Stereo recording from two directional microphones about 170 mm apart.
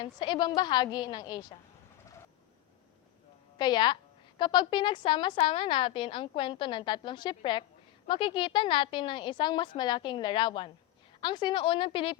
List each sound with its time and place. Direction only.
0.0 s a woman's voice: 25° left (ahead or behind)
3.6 s a woman's voice: 25° left (ahead or behind)